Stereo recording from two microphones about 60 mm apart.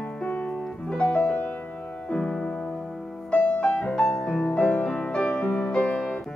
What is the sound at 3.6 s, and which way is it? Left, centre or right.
Music, centre.